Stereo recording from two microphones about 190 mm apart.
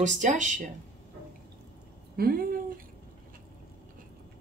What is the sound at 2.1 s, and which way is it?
Speech, 50° right (ahead or behind).